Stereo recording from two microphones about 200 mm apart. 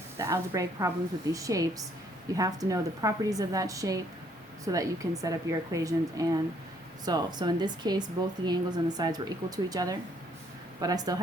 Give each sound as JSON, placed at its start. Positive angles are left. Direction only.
{"t": 0.2, "sound": "a woman's voice", "side_deg": -15}